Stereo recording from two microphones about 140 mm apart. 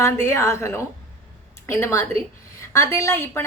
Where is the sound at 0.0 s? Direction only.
20° left (ahead or behind).